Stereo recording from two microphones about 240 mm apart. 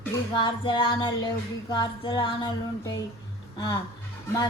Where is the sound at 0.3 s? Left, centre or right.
Centre.